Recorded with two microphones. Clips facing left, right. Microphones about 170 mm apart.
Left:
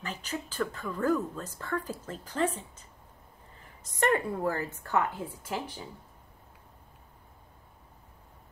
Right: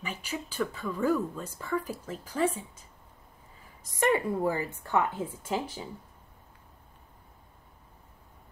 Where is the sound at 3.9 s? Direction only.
10° right (ahead or behind).